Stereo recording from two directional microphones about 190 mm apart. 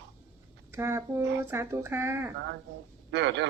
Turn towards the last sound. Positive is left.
turn(degrees=-65)  # may be behind; listen again after turning